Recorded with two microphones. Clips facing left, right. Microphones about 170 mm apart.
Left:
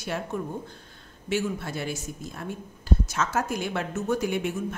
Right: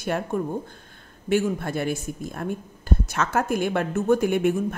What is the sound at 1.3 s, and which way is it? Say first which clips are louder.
A woman's voice: right 5 dB; 50° right (ahead or behind).